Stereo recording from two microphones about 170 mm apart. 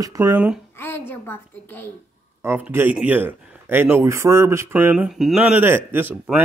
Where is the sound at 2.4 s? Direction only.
10° right (ahead or behind).